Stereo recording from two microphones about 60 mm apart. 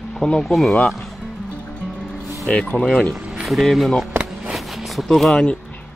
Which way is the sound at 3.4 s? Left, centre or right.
Centre.